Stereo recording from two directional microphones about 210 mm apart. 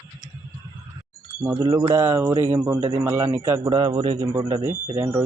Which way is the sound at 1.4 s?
15° right (ahead or behind).